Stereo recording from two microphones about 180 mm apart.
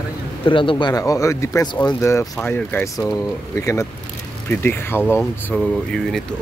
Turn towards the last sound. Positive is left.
turn(degrees=5)  # may be behind; listen again after turning